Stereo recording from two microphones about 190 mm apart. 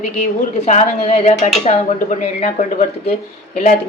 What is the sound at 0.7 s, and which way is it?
Speech, 35° left (ahead or behind).